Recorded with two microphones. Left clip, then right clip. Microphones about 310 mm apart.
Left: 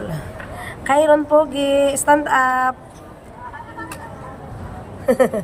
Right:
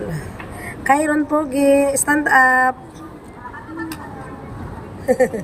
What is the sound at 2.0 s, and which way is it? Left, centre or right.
Speech, centre.